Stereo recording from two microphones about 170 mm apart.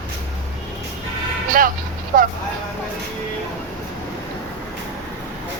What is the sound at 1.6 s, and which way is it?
Speech, 55° right (ahead or behind).